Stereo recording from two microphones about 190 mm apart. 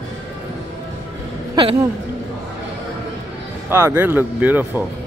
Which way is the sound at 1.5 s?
25° right (ahead or behind).